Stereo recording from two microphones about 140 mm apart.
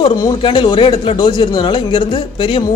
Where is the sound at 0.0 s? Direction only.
30° left (ahead or behind).